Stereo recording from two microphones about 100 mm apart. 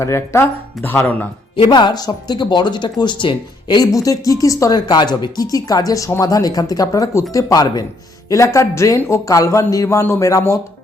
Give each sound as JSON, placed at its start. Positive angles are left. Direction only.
{"t": 0.0, "sound": "speech", "side_deg": 25}
{"t": 1.5, "sound": "speech", "side_deg": 50}
{"t": 3.9, "sound": "speech", "side_deg": 35}
{"t": 8.3, "sound": "speech", "side_deg": 30}